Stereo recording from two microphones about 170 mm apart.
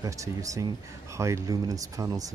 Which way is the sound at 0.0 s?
20° right (ahead or behind).